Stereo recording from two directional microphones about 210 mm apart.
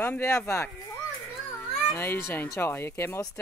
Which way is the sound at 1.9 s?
10° left (ahead or behind).